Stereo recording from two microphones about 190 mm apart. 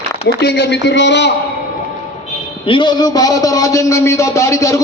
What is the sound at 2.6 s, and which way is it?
A man's voice, 25° left (ahead or behind).